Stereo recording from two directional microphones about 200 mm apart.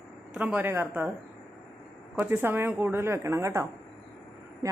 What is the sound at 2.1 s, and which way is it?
A woman's voice, 10° right (ahead or behind).